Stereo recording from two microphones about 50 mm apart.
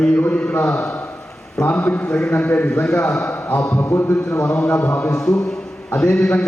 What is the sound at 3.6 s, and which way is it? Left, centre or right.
Speech, left.